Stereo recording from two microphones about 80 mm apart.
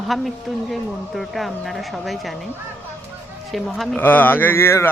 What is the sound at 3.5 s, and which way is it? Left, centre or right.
Speech, centre.